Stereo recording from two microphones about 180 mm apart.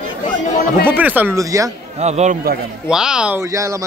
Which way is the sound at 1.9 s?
35° right (ahead or behind).